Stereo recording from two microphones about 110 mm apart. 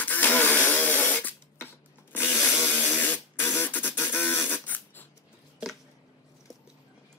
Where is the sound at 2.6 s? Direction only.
15° left (ahead or behind).